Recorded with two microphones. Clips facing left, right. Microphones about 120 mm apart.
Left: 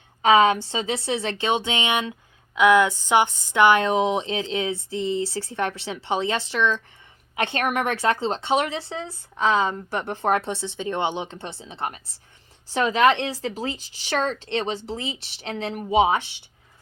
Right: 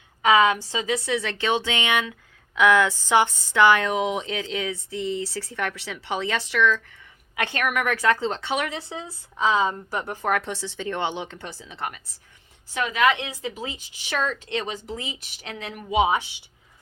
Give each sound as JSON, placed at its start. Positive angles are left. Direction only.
{"t": 0.2, "sound": "a woman's voice", "side_deg": 25}
{"t": 9.0, "sound": "speech", "side_deg": -5}
{"t": 10.1, "sound": "speech", "side_deg": 25}